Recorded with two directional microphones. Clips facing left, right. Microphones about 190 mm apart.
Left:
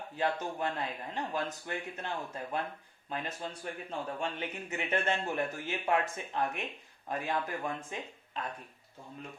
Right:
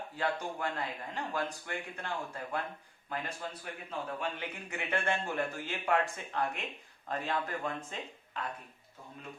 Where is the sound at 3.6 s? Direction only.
30° left (ahead or behind).